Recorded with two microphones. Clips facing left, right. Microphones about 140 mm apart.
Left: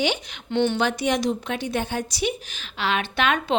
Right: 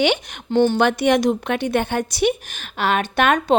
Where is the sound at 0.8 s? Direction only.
60° right (ahead or behind).